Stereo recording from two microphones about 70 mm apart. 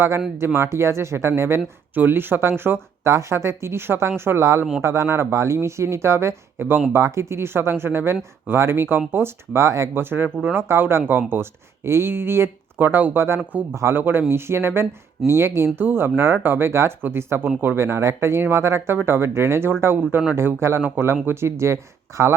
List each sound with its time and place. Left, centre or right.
0.3 s speech: right
2.0 s speech: right
6.9 s speech: right